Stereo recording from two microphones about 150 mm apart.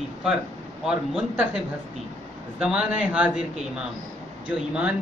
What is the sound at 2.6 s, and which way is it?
Speech, 10° right (ahead or behind).